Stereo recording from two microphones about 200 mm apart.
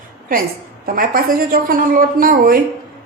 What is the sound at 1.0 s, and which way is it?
A woman's voice, 45° right (ahead or behind).